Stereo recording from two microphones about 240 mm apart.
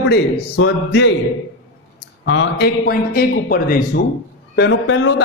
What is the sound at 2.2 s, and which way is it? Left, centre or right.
Speech, left.